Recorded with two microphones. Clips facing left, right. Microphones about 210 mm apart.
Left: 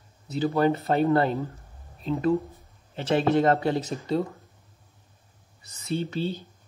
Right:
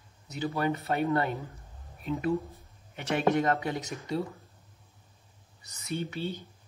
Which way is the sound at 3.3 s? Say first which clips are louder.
Left 6 dB; 30° left (ahead or behind).